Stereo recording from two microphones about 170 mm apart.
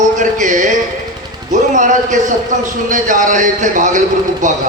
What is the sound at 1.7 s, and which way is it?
A man's voice, 50° right (ahead or behind).